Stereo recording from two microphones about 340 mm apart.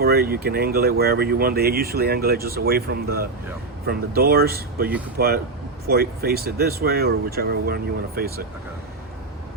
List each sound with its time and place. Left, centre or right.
0.0 s speech: right